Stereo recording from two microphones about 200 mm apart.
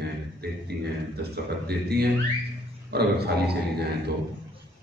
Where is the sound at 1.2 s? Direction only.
55° right (ahead or behind).